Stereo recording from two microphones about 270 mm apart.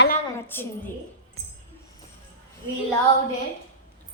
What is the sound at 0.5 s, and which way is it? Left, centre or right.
Speech, centre.